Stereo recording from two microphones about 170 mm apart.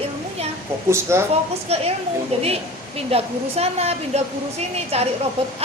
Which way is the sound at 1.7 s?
40° right (ahead or behind).